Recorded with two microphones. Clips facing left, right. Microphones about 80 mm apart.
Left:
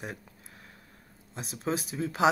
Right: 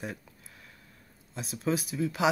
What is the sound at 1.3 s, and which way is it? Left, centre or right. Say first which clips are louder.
Speech: right 2 dB; left.